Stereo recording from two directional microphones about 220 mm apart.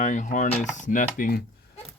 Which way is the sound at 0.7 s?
35° left (ahead or behind).